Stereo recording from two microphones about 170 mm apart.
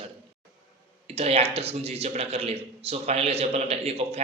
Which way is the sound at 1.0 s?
35° right (ahead or behind).